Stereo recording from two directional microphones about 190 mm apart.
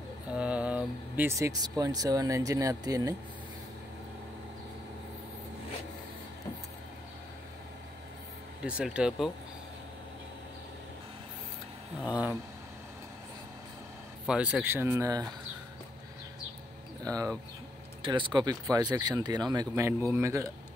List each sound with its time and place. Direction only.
0.3 s speech: 5° right (ahead or behind)
8.6 s speech: 5° right (ahead or behind)
14.2 s speech: 5° right (ahead or behind)
17.0 s speech: 20° right (ahead or behind)